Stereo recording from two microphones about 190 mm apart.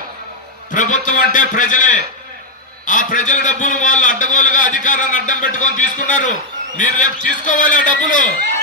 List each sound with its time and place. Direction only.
0.7 s a man's voice: 40° left (ahead or behind)